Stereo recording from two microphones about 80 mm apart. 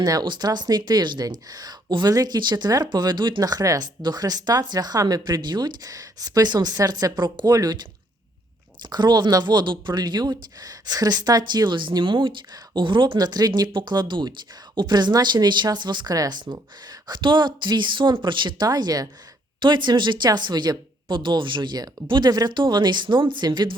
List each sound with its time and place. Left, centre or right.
0.0 s speech: right
5.9 s speech: right
8.8 s speech: right
16.1 s speech: right
17.1 s speech: right
18.6 s speech: right
19.6 s speech: right
22.3 s speech: right